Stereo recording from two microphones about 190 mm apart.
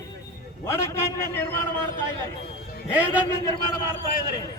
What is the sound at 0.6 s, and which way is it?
Speech, 15° left (ahead or behind).